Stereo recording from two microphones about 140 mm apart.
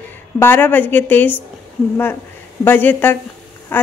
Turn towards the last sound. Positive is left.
turn(degrees=15)  # may be behind; listen again after turning